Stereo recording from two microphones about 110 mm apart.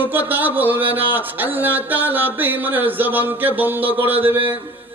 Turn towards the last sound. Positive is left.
turn(degrees=-15)  # may be behind; listen again after turning